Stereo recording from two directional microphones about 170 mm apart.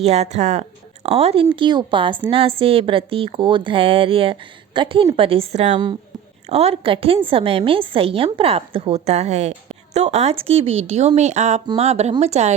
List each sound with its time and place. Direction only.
0.0 s speech: 40° right (ahead or behind)